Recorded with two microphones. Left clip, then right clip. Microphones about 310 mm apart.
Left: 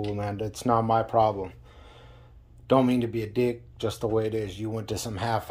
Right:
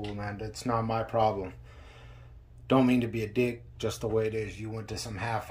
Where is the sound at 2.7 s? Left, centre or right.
Centre.